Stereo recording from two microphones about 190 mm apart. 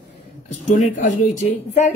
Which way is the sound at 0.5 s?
40° left (ahead or behind).